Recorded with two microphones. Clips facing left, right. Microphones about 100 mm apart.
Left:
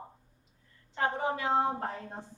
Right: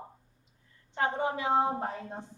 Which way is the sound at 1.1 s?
20° right (ahead or behind).